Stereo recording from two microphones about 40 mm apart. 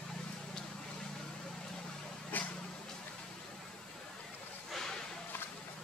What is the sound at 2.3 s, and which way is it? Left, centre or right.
Vehicle, left.